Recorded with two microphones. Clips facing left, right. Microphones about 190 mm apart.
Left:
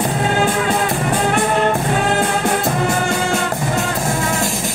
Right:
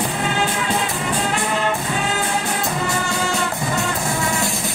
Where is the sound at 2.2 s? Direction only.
50° left (ahead or behind).